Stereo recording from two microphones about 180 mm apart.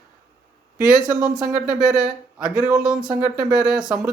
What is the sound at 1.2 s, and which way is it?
Speech, 5° right (ahead or behind).